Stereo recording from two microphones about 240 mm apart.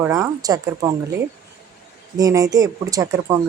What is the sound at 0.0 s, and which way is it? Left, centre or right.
Speech, centre.